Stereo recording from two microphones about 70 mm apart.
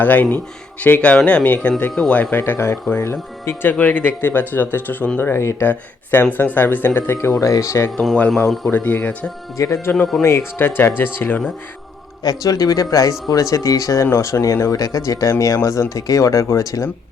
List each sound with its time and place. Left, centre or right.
0.0 s speech: left
2.3 s speech: left
8.7 s speech: left
9.6 s speech: left
9.9 s speech: centre
10.2 s speech: left
12.2 s speech: left